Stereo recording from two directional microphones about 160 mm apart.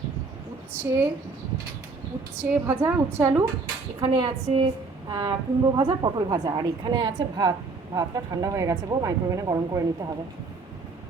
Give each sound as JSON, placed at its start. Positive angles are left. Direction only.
{"t": 0.7, "sound": "a woman's voice", "side_deg": -15}
{"t": 2.4, "sound": "a woman's voice", "side_deg": -15}
{"t": 4.0, "sound": "a woman's voice", "side_deg": -30}